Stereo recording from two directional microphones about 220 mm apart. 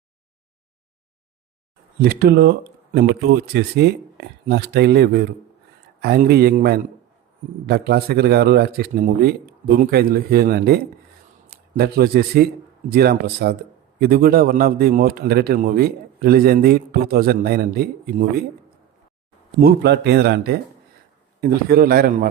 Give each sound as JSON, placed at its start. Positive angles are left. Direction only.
{"t": 2.0, "sound": "a man's voice", "side_deg": -45}
{"t": 11.8, "sound": "a man's voice", "side_deg": -45}
{"t": 19.5, "sound": "a man's voice", "side_deg": -45}